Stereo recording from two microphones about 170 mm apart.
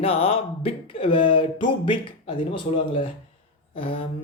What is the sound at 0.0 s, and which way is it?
Speech, 35° left (ahead or behind).